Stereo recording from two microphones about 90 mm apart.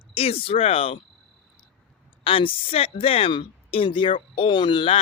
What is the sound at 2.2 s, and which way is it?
Speech, 80° left.